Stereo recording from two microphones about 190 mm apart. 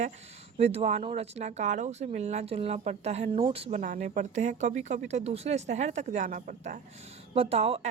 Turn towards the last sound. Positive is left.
turn(degrees=-30)  # may be behind; listen again after turning